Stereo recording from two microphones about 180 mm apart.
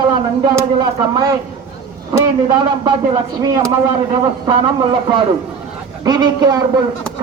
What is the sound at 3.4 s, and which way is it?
A man's voice, 20° right (ahead or behind).